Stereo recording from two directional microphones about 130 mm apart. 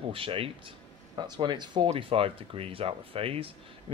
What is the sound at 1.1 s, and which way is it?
Speech, 35° right (ahead or behind).